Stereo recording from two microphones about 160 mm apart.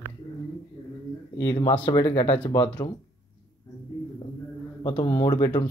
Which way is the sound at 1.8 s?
30° left (ahead or behind).